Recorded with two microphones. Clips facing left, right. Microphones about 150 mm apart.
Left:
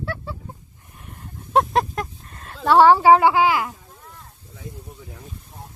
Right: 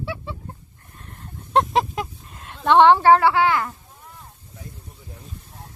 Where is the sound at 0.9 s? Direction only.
10° left (ahead or behind).